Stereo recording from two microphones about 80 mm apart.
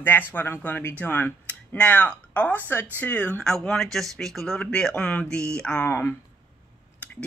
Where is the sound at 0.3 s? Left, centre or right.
Left.